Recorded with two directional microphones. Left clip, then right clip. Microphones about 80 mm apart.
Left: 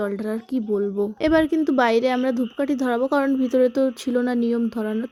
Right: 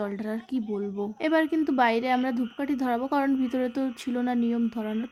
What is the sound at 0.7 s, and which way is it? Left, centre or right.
A woman's voice, left.